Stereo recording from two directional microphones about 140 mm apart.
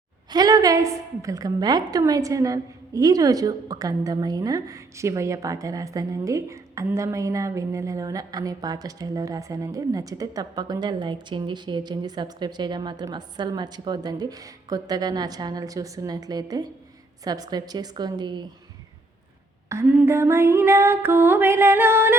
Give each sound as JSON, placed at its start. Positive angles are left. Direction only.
{"t": 0.3, "sound": "a woman's voice", "side_deg": -30}
{"t": 19.9, "sound": "female singing", "side_deg": -15}